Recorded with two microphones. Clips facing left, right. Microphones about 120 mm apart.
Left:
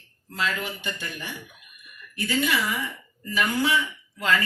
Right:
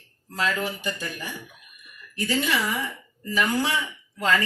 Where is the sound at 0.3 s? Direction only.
40° right (ahead or behind).